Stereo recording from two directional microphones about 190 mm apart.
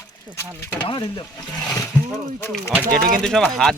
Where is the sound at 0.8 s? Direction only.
25° left (ahead or behind).